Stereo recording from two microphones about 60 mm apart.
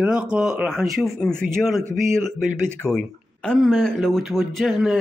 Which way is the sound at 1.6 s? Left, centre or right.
Centre.